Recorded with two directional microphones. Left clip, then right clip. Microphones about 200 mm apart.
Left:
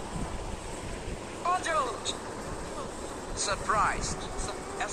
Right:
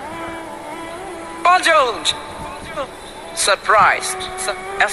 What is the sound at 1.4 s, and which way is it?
Speech, 45° right (ahead or behind).